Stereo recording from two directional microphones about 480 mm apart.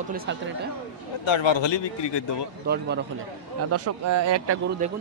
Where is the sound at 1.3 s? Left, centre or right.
Left.